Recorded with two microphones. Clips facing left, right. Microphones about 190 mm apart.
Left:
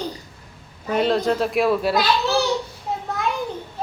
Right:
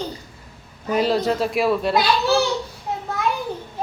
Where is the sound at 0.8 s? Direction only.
5° right (ahead or behind).